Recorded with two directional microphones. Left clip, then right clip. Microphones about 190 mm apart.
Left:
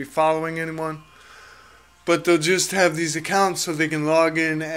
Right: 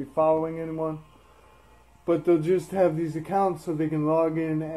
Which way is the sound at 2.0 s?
20° left (ahead or behind).